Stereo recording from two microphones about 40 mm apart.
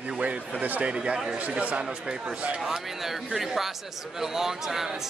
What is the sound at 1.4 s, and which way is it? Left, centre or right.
Speech, right.